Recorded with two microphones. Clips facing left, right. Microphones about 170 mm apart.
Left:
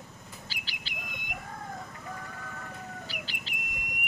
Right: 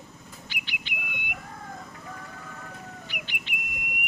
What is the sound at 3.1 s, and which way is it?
Bird, 35° left (ahead or behind).